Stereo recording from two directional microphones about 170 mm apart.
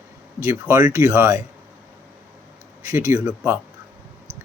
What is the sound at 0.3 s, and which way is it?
Speech, 15° right (ahead or behind).